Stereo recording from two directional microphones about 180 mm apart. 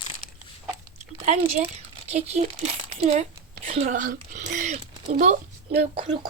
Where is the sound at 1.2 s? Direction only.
35° right (ahead or behind).